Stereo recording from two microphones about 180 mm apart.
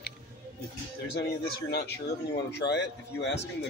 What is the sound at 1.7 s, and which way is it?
Speech, 65° left (ahead or behind).